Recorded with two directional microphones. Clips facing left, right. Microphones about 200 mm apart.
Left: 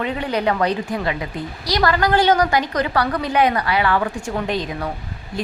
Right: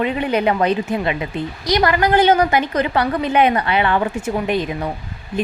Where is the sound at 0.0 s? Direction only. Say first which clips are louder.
Right 3 dB; 20° right (ahead or behind).